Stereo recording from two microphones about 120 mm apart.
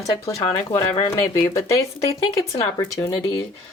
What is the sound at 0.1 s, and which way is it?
Speech, 30° left (ahead or behind).